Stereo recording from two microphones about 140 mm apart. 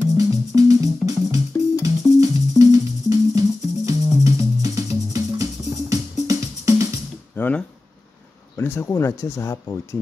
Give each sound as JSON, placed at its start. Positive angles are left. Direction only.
{"t": 0.2, "sound": "music", "side_deg": -25}
{"t": 7.3, "sound": "a sound", "side_deg": 15}
{"t": 8.5, "sound": "speech", "side_deg": 20}